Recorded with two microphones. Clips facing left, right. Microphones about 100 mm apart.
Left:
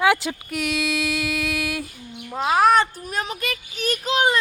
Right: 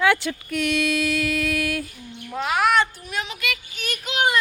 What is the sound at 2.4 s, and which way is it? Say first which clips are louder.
A child's voice: left 3 dB; 35° left (ahead or behind).